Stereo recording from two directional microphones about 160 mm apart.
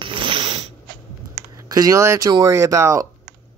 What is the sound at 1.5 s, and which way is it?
Speech, 25° right (ahead or behind).